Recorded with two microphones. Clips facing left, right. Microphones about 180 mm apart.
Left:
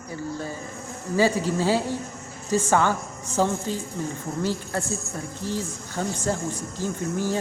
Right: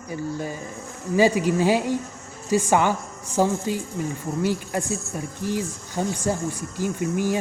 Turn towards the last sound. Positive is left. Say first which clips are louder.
# right 3 dB
turn(degrees=-15)  # may be behind; listen again after turning